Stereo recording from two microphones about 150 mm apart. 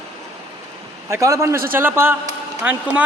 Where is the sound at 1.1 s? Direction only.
20° right (ahead or behind).